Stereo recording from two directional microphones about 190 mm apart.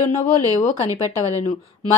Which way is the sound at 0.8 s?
15° right (ahead or behind).